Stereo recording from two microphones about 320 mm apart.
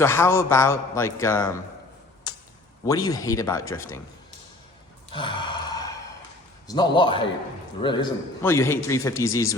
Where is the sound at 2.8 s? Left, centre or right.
Centre.